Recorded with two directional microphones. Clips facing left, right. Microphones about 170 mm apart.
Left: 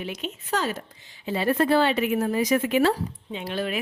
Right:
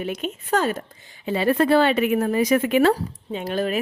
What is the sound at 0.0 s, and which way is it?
Speech, 50° right (ahead or behind).